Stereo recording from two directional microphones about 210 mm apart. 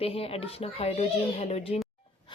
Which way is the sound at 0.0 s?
30° left (ahead or behind).